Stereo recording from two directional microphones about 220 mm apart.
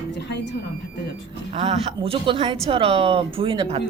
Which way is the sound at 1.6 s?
30° right (ahead or behind).